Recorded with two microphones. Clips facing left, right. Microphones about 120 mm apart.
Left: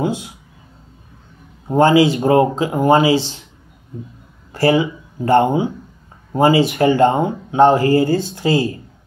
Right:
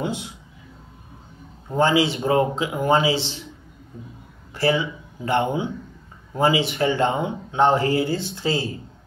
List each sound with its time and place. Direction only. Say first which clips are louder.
1.7 s speech: left 7 dB; 45° left (ahead or behind)
4.6 s speech: left 6 dB; 50° left (ahead or behind)